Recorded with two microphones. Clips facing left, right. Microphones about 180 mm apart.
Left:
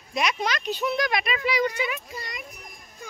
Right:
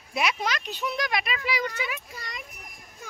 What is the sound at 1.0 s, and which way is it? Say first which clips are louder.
Speech: left 3 dB; 50° left (ahead or behind).